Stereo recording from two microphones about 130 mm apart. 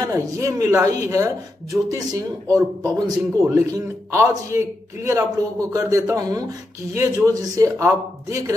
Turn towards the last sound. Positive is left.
turn(degrees=-25)  # may be behind; listen again after turning